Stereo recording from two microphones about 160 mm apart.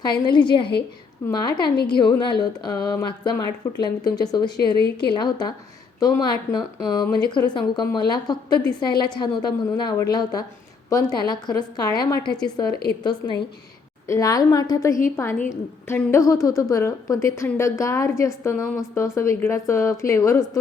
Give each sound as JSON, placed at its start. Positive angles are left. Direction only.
{"t": 0.0, "sound": "a woman's voice", "side_deg": 30}
{"t": 1.7, "sound": "a woman's voice", "side_deg": 80}
{"t": 2.0, "sound": "a woman's voice", "side_deg": 30}